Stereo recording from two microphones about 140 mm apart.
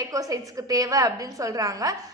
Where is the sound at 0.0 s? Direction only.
25° right (ahead or behind).